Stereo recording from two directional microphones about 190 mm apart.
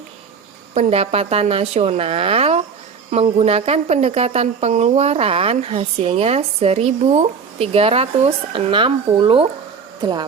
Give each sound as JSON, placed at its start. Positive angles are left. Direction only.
{"t": 0.7, "sound": "speech", "side_deg": -35}